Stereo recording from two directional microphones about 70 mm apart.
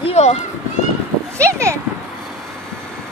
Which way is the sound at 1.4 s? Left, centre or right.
Right.